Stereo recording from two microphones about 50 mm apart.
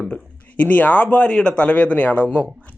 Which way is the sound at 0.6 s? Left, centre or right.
Left.